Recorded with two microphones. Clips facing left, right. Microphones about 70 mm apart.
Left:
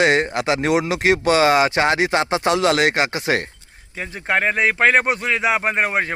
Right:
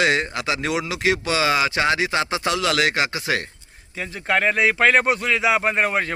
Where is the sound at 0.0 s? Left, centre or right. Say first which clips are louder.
Left 4 dB; left.